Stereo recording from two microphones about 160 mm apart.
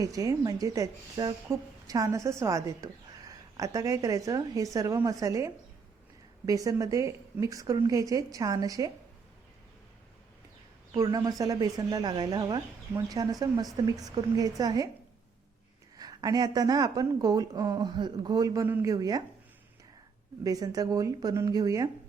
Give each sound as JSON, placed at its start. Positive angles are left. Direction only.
{"t": 0.0, "sound": "speech", "side_deg": -20}
{"t": 10.9, "sound": "speech", "side_deg": -25}
{"t": 16.0, "sound": "speech", "side_deg": -25}
{"t": 20.4, "sound": "speech", "side_deg": -25}